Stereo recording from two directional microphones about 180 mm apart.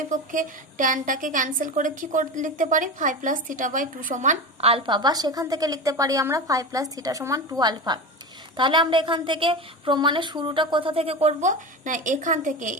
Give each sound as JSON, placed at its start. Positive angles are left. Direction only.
{"t": 0.1, "sound": "a woman's voice", "side_deg": -45}